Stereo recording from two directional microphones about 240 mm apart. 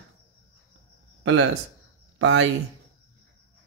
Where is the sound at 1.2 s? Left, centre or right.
Right.